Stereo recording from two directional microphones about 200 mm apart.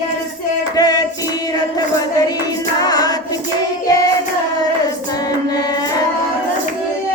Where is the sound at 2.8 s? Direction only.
20° left (ahead or behind).